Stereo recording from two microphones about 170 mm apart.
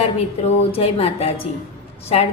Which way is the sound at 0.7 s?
35° left (ahead or behind).